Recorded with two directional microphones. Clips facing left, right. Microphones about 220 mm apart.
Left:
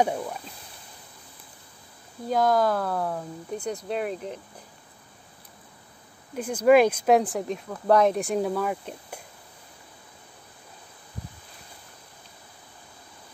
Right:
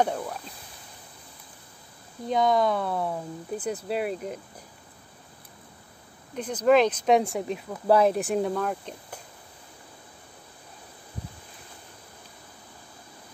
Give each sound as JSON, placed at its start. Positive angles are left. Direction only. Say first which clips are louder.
{"t": 0.0, "sound": "speech", "louder": "left 1 dB", "side_deg": 5}
{"t": 2.2, "sound": "speech", "louder": "left 1 dB", "side_deg": 0}
{"t": 6.3, "sound": "speech", "louder": "left 2 dB", "side_deg": 10}